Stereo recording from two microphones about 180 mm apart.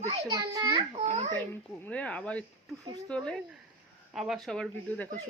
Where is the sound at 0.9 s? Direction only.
40° right (ahead or behind).